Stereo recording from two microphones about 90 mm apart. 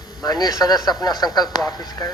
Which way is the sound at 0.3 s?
45° left (ahead or behind).